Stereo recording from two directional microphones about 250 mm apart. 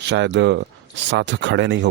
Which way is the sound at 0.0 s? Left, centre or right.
Right.